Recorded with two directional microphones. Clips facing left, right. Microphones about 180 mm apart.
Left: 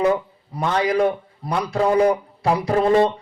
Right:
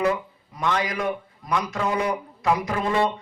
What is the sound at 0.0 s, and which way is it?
A man's voice, 35° left (ahead or behind).